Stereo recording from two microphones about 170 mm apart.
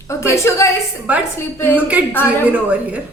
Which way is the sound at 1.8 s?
10° right (ahead or behind).